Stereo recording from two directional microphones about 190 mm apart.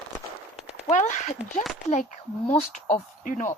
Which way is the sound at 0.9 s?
40° left (ahead or behind).